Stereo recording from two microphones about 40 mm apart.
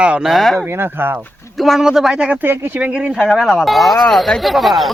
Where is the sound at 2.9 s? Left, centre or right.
Right.